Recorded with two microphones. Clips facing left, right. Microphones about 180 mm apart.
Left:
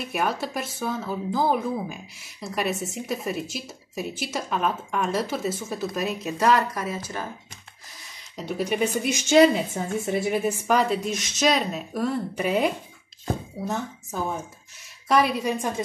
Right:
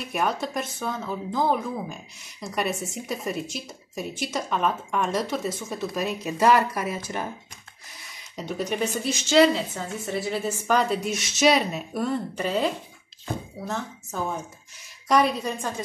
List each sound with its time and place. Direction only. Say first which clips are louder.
0.1 s speech: right 1 dB; 5° left (ahead or behind); by 7.2 s 15° right (ahead or behind)
8.4 s a woman's voice: left 2 dB; 5° left (ahead or behind)